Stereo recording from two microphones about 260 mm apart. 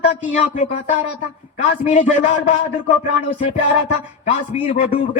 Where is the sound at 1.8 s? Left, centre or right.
Left.